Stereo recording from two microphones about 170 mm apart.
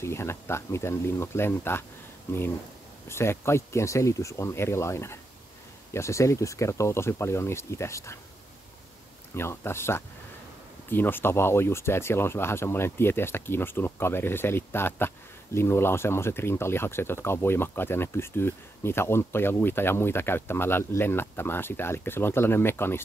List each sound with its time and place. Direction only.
0.0 s speech: 15° left (ahead or behind)
9.3 s speech: 15° left (ahead or behind)